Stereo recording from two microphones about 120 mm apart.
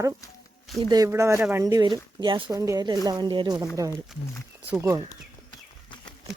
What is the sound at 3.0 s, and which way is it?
Speech, 40° right (ahead or behind).